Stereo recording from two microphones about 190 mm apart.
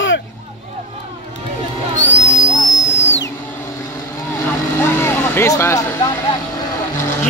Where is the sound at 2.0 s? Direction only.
75° left (ahead or behind).